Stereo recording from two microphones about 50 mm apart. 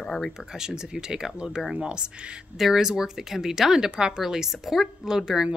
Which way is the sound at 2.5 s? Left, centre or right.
Centre.